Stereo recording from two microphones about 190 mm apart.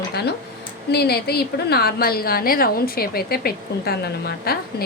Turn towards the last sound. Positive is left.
turn(degrees=55)  # may be behind; listen again after turning